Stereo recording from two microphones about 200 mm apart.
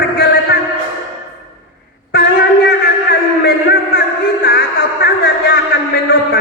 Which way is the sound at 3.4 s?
50° left (ahead or behind).